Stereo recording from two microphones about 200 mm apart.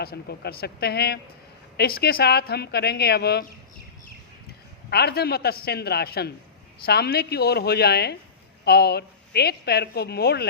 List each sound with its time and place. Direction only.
0.0 s a woman's voice: 55° left (ahead or behind)
4.9 s a woman's voice: 55° left (ahead or behind)